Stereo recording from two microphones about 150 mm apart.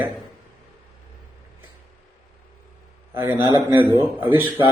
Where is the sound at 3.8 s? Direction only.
30° right (ahead or behind).